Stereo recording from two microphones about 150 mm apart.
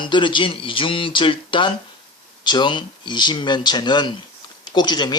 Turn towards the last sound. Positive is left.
turn(degrees=30)  # may be behind; listen again after turning